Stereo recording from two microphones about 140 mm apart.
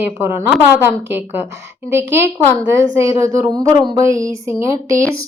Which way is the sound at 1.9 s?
15° right (ahead or behind).